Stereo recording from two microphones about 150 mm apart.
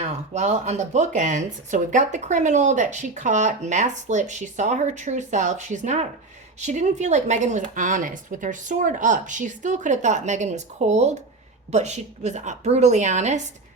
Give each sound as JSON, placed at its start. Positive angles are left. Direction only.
{"t": 0.0, "sound": "speech", "side_deg": -50}